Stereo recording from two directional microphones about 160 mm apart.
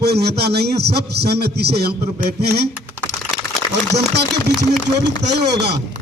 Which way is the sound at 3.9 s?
90° right.